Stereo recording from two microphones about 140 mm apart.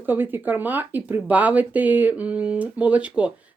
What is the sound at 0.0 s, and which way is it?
Speech, 15° right (ahead or behind).